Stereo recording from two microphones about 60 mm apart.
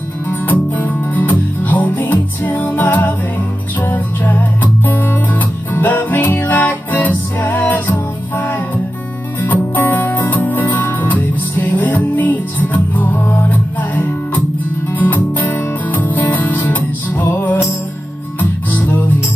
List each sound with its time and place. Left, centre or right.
0.3 s music: left